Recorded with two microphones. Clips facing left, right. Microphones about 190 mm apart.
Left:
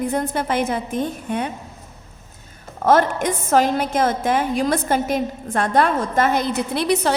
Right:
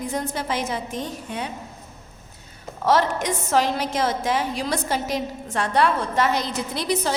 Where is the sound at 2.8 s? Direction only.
50° left (ahead or behind).